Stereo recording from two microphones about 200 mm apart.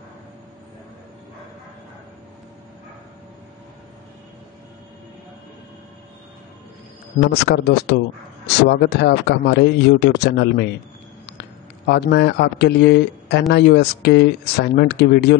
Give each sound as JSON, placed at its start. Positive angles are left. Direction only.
{"t": 7.2, "sound": "speech", "side_deg": 60}